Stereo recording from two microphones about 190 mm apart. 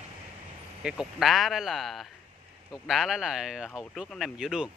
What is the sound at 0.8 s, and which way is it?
Speech, centre (ahead or behind).